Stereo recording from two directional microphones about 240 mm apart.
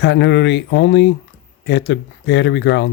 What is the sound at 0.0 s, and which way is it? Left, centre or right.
Speech, left.